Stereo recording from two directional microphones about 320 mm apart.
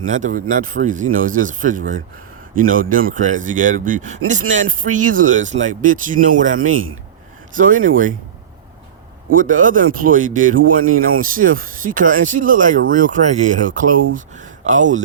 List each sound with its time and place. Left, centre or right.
0.2 s a man's voice: right
9.3 s a man's voice: right